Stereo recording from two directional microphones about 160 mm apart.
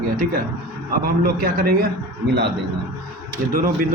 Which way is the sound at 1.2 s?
70° right (ahead or behind).